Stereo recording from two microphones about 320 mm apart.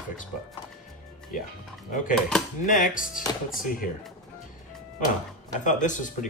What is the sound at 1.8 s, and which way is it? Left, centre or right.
Speech, left.